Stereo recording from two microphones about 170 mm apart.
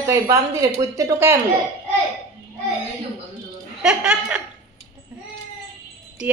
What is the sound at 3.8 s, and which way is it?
Speech, 5° right (ahead or behind).